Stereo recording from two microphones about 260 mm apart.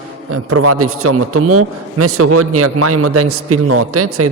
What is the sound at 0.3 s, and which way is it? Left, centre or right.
A man's voice, right.